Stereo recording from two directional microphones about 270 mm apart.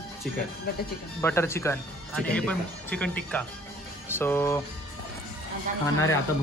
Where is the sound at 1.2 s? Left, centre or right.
Centre.